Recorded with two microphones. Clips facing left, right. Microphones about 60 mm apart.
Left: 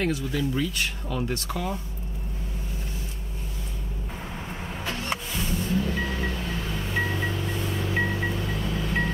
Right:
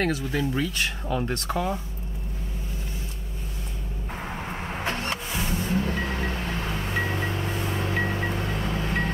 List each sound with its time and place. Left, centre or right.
0.0 s speech: right
0.4 s speech: right
4.7 s vehicle: right
5.3 s music: right